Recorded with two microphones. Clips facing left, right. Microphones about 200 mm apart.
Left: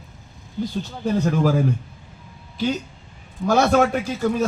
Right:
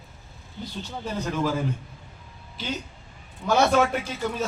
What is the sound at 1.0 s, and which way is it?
Speech, 45° left (ahead or behind).